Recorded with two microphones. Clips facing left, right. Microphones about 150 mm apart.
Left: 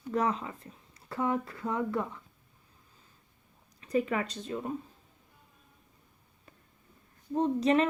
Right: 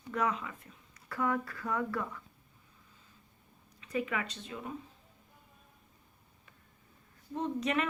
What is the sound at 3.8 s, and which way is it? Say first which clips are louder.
Speech: left 5 dB; 35° left (ahead or behind).